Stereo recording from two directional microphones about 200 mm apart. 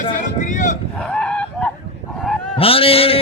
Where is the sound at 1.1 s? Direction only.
5° left (ahead or behind).